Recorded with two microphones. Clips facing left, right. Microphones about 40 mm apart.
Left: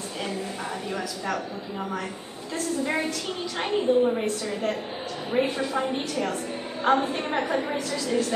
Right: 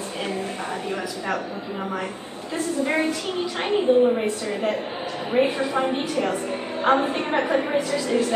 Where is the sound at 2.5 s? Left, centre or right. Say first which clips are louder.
Right 3 dB; centre.